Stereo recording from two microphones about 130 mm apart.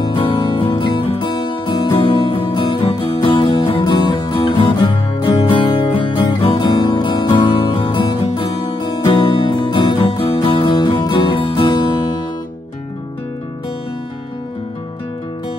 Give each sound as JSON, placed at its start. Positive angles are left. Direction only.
{"t": 0.0, "sound": "music", "side_deg": 35}